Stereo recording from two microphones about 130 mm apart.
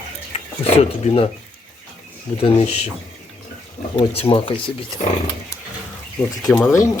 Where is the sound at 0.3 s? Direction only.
50° left (ahead or behind).